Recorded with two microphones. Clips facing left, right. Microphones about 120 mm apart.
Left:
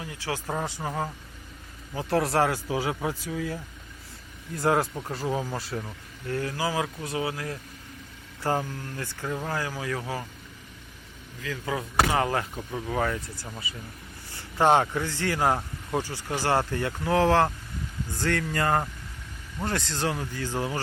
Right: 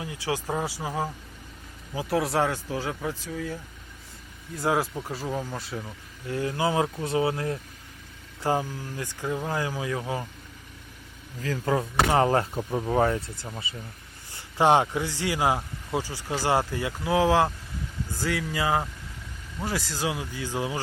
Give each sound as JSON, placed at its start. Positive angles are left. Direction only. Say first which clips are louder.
{"t": 0.0, "sound": "speech", "louder": "right 3 dB", "side_deg": -15}
{"t": 2.6, "sound": "speech", "louder": "left 2 dB", "side_deg": 10}
{"t": 6.2, "sound": "speech", "louder": "right 2 dB", "side_deg": -15}
{"t": 8.4, "sound": "speech", "louder": "right 1 dB", "side_deg": -15}
{"t": 11.4, "sound": "speech", "louder": "right 5 dB", "side_deg": -35}
{"t": 14.6, "sound": "speech", "louder": "right 1 dB", "side_deg": -15}